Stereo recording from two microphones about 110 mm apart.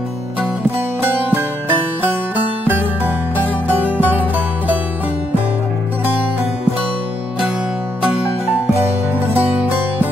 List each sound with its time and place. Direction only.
1.0 s music: 20° right (ahead or behind)